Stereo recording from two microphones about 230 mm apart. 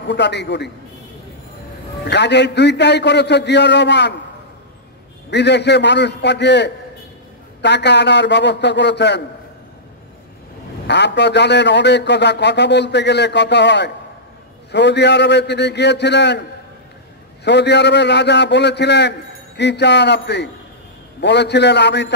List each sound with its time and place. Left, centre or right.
0.1 s a man's voice: left
2.0 s a man's voice: left
5.3 s a man's voice: left
10.9 s a man's voice: left
17.5 s a man's voice: left